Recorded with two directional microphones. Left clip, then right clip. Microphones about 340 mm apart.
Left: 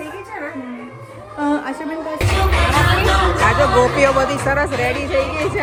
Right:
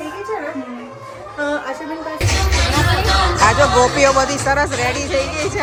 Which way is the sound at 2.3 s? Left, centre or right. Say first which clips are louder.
Left 3 dB; centre.